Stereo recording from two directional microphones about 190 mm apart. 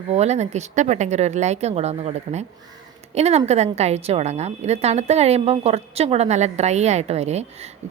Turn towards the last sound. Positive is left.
turn(degrees=-35)  # may be behind; listen again after turning